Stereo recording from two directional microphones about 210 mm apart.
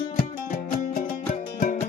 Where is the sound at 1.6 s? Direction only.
35° left (ahead or behind).